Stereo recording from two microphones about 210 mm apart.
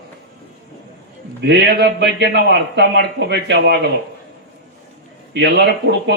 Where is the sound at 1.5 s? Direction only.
50° right (ahead or behind).